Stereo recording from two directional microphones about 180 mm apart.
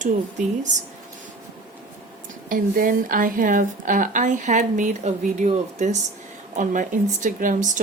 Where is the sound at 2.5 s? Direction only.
50° right (ahead or behind).